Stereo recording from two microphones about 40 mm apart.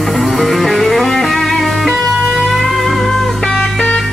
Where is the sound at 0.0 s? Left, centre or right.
Centre.